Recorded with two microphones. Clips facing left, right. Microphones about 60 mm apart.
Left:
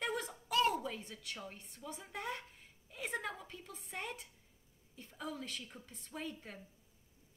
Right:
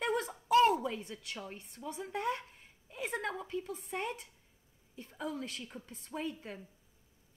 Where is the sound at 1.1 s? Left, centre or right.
Right.